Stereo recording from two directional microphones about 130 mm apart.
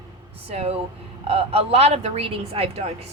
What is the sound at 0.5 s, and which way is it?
Speech, 50° right (ahead or behind).